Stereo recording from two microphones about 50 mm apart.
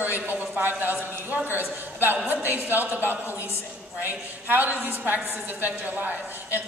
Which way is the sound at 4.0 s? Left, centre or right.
Right.